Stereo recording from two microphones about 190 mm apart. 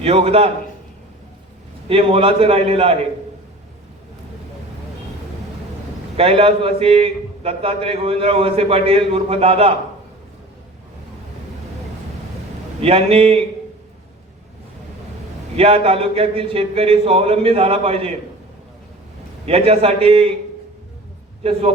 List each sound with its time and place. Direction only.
0.0 s a man's voice: 30° right (ahead or behind)
1.9 s a man's voice: 30° right (ahead or behind)
6.1 s a man's voice: 30° right (ahead or behind)
12.8 s a man's voice: 30° right (ahead or behind)
15.5 s a man's voice: 30° right (ahead or behind)
19.5 s a man's voice: 30° right (ahead or behind)